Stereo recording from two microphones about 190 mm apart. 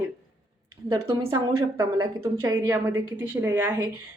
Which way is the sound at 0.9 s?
15° right (ahead or behind).